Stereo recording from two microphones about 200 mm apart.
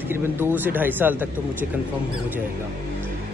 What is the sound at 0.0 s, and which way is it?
Speech, 10° right (ahead or behind).